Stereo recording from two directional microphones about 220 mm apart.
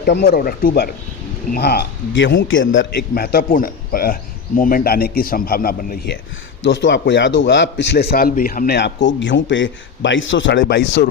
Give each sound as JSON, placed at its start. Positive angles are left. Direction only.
{"t": 0.0, "sound": "a man's voice", "side_deg": 45}
{"t": 6.6, "sound": "a man's voice", "side_deg": 55}